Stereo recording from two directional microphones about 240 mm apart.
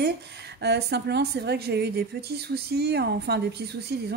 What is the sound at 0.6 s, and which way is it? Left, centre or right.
Speech, right.